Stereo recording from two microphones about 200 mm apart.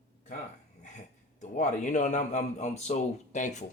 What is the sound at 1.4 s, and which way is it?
A man's voice, 35° left (ahead or behind).